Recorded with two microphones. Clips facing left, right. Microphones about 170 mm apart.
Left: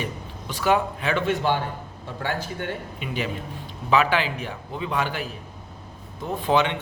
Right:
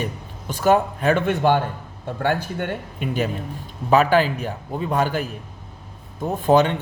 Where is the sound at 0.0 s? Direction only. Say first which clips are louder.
Right 3 dB; 45° right (ahead or behind).